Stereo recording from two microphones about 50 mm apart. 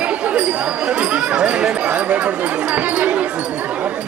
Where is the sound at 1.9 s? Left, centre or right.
Right.